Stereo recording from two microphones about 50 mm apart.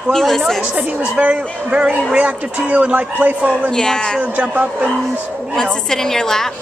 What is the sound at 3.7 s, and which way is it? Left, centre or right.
Speech, centre.